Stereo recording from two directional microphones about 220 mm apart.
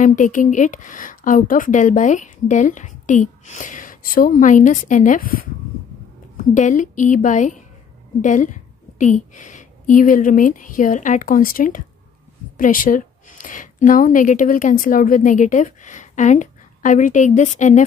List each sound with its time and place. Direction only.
0.0 s a woman's voice: 35° left (ahead or behind)